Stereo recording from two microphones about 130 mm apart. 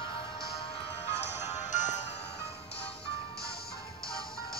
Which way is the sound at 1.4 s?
65° left (ahead or behind).